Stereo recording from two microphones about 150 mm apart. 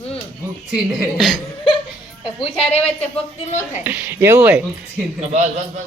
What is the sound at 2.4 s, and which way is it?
Speech, 40° left (ahead or behind).